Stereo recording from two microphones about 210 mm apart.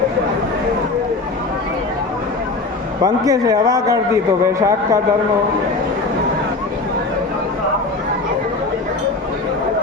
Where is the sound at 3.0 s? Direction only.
15° right (ahead or behind).